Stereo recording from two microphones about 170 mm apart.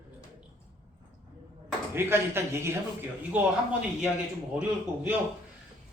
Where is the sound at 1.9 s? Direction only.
15° right (ahead or behind).